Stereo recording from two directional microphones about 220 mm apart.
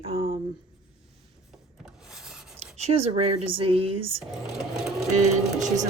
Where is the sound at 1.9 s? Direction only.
5° right (ahead or behind).